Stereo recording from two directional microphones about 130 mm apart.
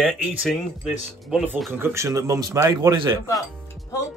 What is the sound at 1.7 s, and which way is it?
Speech, 20° right (ahead or behind).